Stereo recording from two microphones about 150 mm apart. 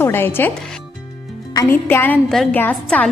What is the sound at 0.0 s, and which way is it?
Speech, 15° left (ahead or behind).